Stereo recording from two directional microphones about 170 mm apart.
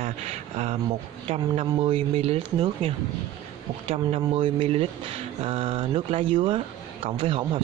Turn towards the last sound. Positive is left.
turn(degrees=-30)  # may be behind; listen again after turning